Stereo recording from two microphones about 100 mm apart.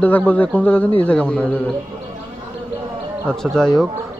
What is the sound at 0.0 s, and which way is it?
A man's voice, 15° left (ahead or behind).